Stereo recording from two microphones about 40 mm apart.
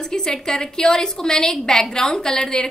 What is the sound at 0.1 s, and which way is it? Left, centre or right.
A woman's voice, centre.